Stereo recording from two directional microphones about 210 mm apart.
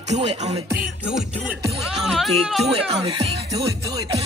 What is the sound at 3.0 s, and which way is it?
Speech, 30° right (ahead or behind).